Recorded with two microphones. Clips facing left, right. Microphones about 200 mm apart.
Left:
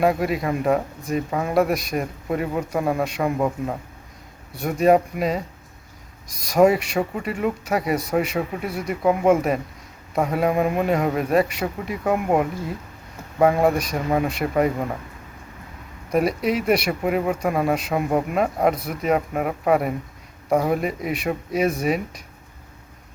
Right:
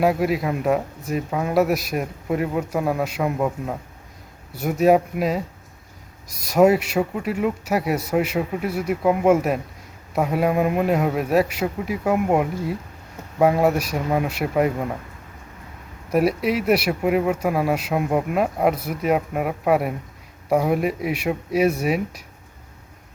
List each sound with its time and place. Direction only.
0.0 s speech: 5° right (ahead or behind)
6.5 s speech: 5° right (ahead or behind)
16.0 s speech: 5° right (ahead or behind)